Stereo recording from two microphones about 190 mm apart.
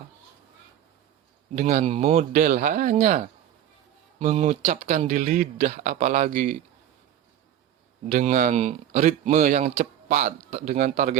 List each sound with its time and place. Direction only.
1.5 s speech: 40° right (ahead or behind)
8.1 s speech: 45° right (ahead or behind)